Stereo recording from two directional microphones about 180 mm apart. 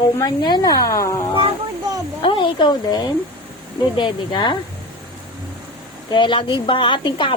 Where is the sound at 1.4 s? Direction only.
20° right (ahead or behind).